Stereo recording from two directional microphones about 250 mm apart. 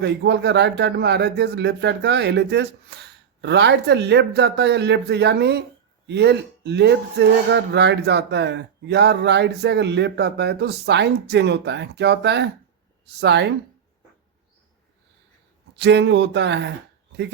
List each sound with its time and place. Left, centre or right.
0.0 s speech: right
15.7 s speech: right